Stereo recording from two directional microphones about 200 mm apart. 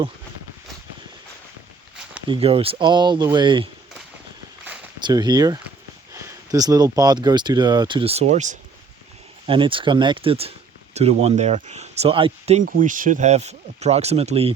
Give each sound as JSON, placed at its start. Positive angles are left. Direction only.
{"t": 2.3, "sound": "speech", "side_deg": -30}
{"t": 4.9, "sound": "speech", "side_deg": -20}
{"t": 9.5, "sound": "speech", "side_deg": -25}
{"t": 12.6, "sound": "speech", "side_deg": -45}